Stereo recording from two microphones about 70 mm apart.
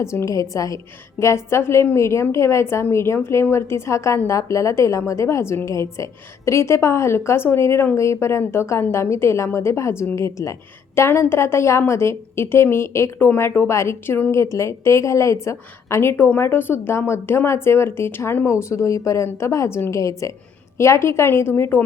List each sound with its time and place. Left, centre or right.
0.0 s a woman's voice: left
1.2 s a woman's voice: left